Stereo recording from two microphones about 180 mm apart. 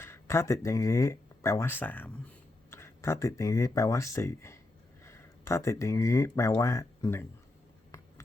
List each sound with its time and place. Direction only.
0.0 s speech: 15° left (ahead or behind)